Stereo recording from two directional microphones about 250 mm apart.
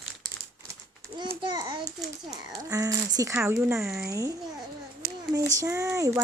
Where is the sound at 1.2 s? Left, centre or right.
Centre.